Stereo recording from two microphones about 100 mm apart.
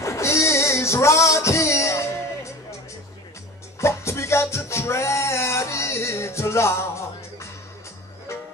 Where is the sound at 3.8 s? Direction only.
25° left (ahead or behind).